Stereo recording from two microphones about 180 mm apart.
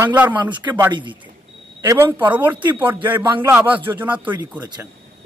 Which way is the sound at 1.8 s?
15° right (ahead or behind).